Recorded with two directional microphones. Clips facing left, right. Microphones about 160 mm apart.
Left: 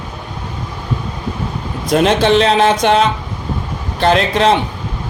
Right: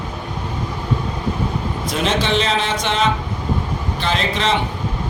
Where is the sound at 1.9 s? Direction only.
55° left (ahead or behind).